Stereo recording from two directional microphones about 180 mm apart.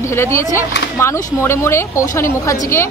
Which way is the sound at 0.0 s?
15° left (ahead or behind).